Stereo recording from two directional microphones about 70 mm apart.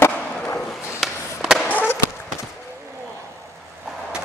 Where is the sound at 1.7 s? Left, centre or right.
Left.